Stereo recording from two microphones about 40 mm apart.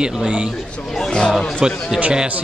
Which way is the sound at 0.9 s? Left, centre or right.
Centre.